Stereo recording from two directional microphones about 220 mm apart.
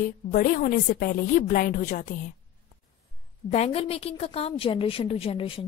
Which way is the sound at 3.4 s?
30° left (ahead or behind).